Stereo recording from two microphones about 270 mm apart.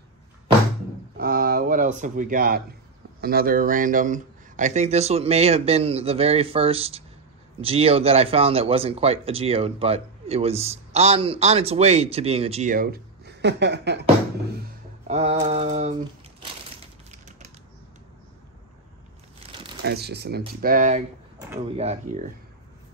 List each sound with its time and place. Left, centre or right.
1.1 s a sound: right
3.2 s speech: right
14.6 s a sound: right
15.4 s mantra: right
16.8 s typewriter: right
19.8 s speech: right